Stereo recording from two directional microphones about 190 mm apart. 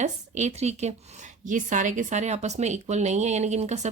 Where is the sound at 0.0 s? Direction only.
35° right (ahead or behind).